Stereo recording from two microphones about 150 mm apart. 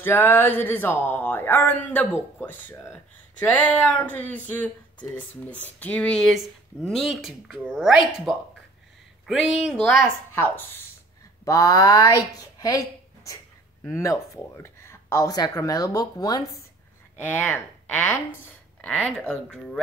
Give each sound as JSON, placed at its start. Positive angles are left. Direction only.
{"t": 0.0, "sound": "speech", "side_deg": 15}
{"t": 10.0, "sound": "speech", "side_deg": 15}
{"t": 12.5, "sound": "a sound", "side_deg": 20}
{"t": 13.8, "sound": "speech", "side_deg": 20}
{"t": 17.2, "sound": "speech", "side_deg": 10}